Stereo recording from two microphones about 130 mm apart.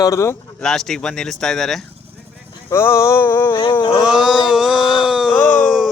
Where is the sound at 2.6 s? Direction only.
20° left (ahead or behind).